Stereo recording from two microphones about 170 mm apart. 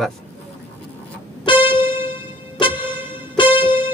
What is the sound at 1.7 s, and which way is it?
Music, 10° right (ahead or behind).